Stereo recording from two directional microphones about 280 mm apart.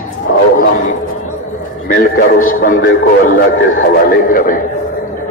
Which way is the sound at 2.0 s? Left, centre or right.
Left.